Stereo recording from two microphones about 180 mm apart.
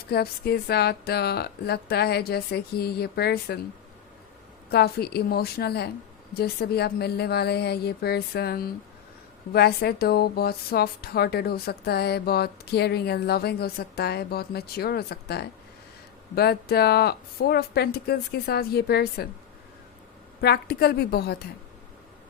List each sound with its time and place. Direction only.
0.1 s a woman's voice: 60° left (ahead or behind)
4.7 s a woman's voice: 60° left (ahead or behind)
20.4 s a woman's voice: 60° left (ahead or behind)